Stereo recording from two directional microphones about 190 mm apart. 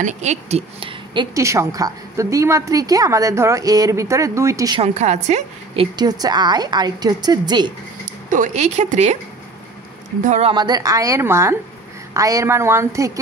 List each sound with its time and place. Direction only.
0.0 s speech: 35° right (ahead or behind); by 4.7 s 15° right (ahead or behind)
4.7 s a woman's voice: 35° right (ahead or behind)
5.9 s a woman's voice: 20° right (ahead or behind)
8.3 s a woman's voice: 40° right (ahead or behind)
10.2 s a woman's voice: 40° right (ahead or behind)
10.5 s speech: 20° right (ahead or behind)